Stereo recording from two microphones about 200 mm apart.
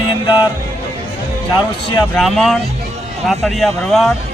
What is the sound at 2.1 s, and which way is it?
Speech, centre (ahead or behind).